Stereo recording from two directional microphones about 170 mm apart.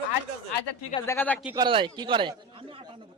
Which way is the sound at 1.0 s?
15° left (ahead or behind).